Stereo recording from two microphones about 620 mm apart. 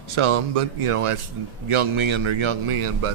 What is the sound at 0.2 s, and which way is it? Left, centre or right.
Speech, right.